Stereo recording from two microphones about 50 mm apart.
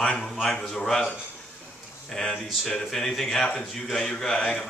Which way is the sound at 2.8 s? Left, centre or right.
Centre.